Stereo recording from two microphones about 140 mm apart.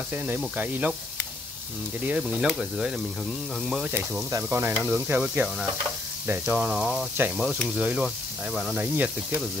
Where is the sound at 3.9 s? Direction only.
15° right (ahead or behind).